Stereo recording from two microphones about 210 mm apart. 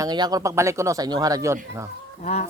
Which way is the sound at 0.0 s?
20° right (ahead or behind).